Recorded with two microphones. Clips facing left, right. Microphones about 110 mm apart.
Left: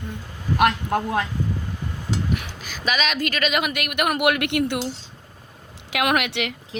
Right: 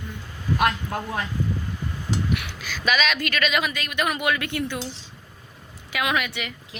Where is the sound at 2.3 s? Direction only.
40° left (ahead or behind); by 4.7 s 60° left (ahead or behind).